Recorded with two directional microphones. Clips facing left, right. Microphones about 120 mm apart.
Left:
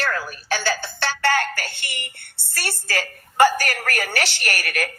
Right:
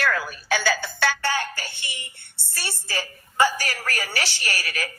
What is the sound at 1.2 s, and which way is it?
A woman's voice, 70° left (ahead or behind).